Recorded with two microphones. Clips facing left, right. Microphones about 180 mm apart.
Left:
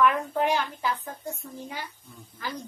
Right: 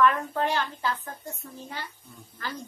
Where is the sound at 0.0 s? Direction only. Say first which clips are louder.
Even; 15° left (ahead or behind).